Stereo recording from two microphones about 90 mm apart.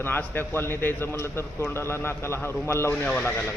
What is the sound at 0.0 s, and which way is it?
A man's voice, 25° left (ahead or behind).